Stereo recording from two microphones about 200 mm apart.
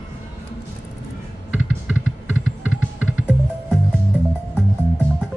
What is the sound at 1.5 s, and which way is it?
Music, 5° right (ahead or behind).